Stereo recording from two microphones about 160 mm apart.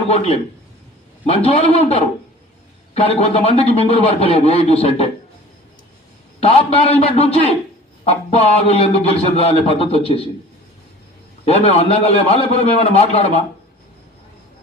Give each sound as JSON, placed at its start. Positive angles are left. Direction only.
{"t": 0.1, "sound": "a man's voice", "side_deg": 40}
{"t": 6.4, "sound": "a man's voice", "side_deg": 40}
{"t": 11.4, "sound": "a man's voice", "side_deg": 40}